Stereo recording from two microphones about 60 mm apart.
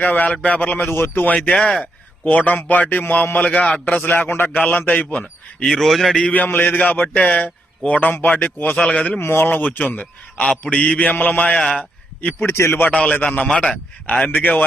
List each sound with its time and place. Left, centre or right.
0.0 s a man's voice: left
1.6 s a man's voice: left
5.6 s a man's voice: centre
6.3 s a man's voice: left
9.2 s speech: left
9.6 s a man's voice: left
10.3 s mantra: centre
10.6 s a man's voice: left
11.5 s a man's voice: centre
12.5 s a man's voice: left
12.8 s a man's voice: left
14.3 s a man's voice: left